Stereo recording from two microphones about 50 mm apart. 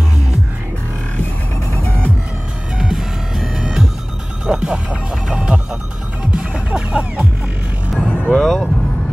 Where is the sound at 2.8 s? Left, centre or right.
Centre.